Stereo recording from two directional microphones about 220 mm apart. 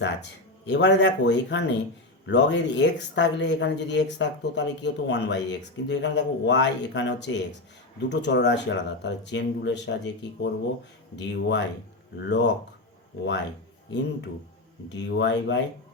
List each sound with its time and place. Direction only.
0.0 s speech: 55° left (ahead or behind)
14.8 s speech: 55° left (ahead or behind)